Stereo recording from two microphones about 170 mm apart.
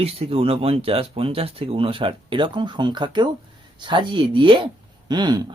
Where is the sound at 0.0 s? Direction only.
35° right (ahead or behind).